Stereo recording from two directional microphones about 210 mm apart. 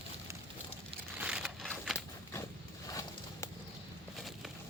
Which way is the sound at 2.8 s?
15° left (ahead or behind).